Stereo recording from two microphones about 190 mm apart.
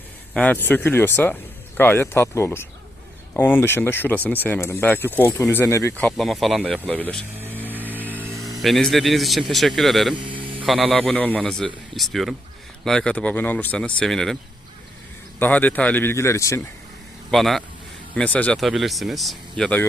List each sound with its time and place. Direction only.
0.3 s speech: 10° left (ahead or behind)
8.1 s speech: 10° right (ahead or behind)
10.2 s a sound: 25° right (ahead or behind)
10.7 s speech: centre (ahead or behind)
15.4 s speech: 10° left (ahead or behind)
17.3 s speech: centre (ahead or behind)